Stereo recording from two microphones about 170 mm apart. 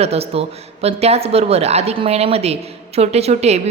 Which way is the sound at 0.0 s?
35° right (ahead or behind).